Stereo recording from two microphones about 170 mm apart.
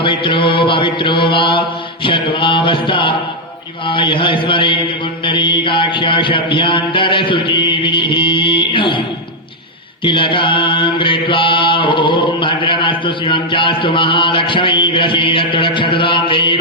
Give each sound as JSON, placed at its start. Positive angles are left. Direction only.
{"t": 0.0, "sound": "mantra", "side_deg": 30}
{"t": 10.0, "sound": "mantra", "side_deg": 30}